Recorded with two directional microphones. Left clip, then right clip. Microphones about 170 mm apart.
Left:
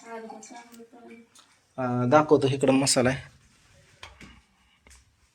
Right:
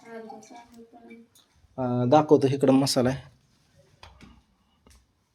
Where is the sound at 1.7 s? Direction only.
20° right (ahead or behind).